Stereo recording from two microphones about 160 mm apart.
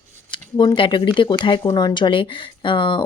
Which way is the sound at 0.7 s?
30° left (ahead or behind).